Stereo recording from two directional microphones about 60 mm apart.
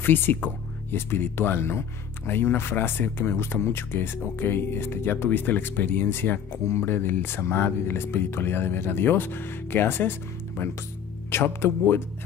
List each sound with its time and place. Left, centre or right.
0.0 s speech: left
11.3 s speech: left